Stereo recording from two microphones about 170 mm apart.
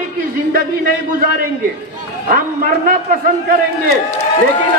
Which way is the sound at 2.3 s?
55° right (ahead or behind).